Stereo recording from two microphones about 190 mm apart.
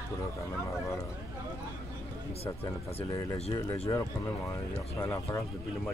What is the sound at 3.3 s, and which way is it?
Speech, 30° left (ahead or behind).